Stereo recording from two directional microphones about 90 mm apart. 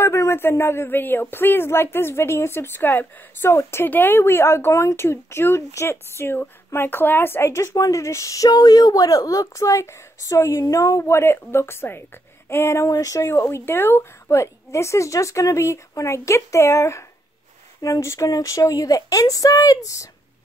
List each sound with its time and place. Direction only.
0.0 s speech: 30° left (ahead or behind)